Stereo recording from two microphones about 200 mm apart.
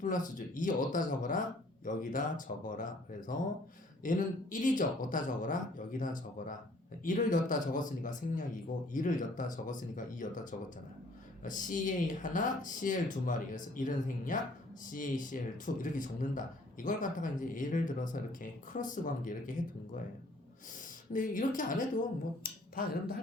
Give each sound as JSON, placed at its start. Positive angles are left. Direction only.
{"t": 0.0, "sound": "speech", "side_deg": 40}
{"t": 21.1, "sound": "speech", "side_deg": 40}